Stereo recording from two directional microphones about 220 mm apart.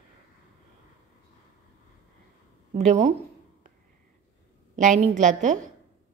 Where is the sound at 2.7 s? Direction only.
30° right (ahead or behind).